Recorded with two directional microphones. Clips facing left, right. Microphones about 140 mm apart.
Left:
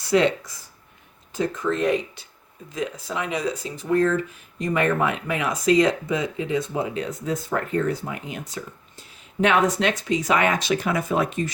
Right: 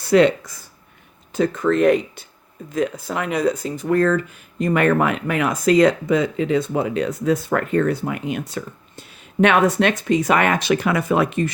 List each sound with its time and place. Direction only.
0.0 s speech: 55° right (ahead or behind)
1.3 s speech: 70° right (ahead or behind)